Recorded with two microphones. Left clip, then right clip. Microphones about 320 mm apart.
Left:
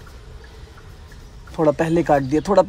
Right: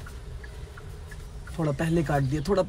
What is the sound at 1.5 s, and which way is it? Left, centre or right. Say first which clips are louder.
Speech: left 10 dB; centre.